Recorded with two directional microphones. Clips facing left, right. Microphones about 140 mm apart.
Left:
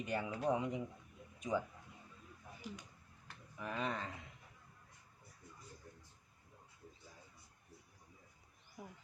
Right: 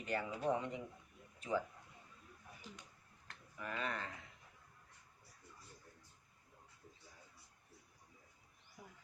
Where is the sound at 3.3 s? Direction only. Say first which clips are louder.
Left 2 dB; 10° left (ahead or behind).